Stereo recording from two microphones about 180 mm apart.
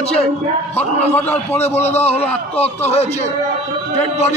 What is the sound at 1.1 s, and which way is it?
Speech, 10° left (ahead or behind).